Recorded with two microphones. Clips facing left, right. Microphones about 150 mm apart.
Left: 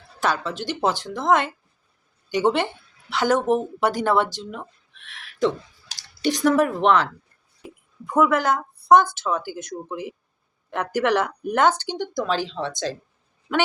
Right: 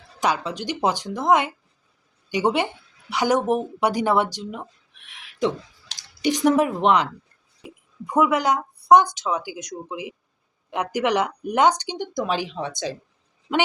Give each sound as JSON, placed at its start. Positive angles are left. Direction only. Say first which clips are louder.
{"t": 0.2, "sound": "speech", "louder": "right 1 dB", "side_deg": -15}